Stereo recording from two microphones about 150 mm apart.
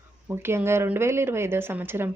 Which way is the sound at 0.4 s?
15° right (ahead or behind).